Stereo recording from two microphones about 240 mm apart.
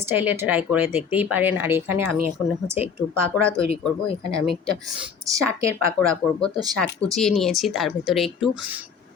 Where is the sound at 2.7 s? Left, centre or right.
Left.